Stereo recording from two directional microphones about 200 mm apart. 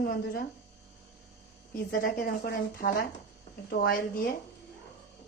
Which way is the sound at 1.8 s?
45° left (ahead or behind).